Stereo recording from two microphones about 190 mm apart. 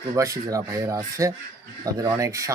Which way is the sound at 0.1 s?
15° right (ahead or behind).